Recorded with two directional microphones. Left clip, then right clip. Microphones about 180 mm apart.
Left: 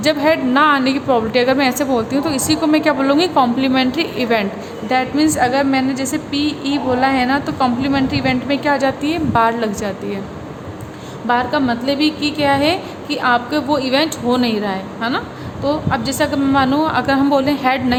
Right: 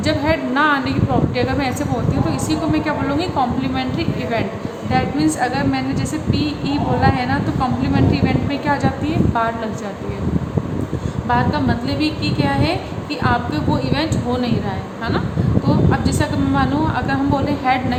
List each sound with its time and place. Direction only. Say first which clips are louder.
0.0 s a woman's voice: left 4 dB; 50° left (ahead or behind)
11.3 s a woman's voice: left 2 dB; 50° left (ahead or behind)
15.9 s a woman's voice: left 2 dB; 45° left (ahead or behind)